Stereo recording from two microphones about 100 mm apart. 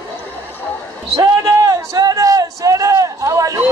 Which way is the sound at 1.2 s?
40° right (ahead or behind).